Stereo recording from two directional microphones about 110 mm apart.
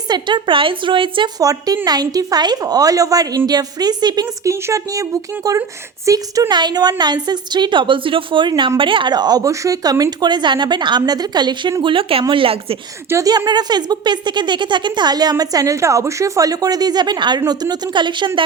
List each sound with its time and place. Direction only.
0.1 s a woman's voice: 45° right (ahead or behind)
1.4 s a woman's voice: 35° right (ahead or behind)
4.5 s a woman's voice: 25° right (ahead or behind)
11.8 s a woman's voice: 50° right (ahead or behind)
13.1 s a woman's voice: 30° right (ahead or behind); by 18.3 s 45° right (ahead or behind)